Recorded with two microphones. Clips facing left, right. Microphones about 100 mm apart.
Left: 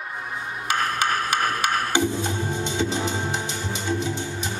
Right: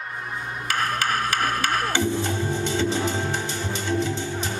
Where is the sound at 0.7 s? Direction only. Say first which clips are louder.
Left 1 dB; 20° left (ahead or behind).